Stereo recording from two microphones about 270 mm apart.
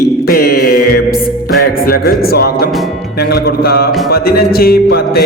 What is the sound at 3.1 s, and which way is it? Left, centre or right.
Music, left.